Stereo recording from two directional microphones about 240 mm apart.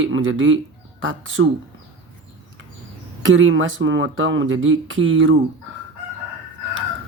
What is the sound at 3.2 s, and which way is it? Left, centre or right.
Speech, right.